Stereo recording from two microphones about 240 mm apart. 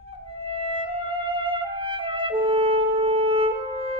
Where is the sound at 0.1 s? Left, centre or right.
Right.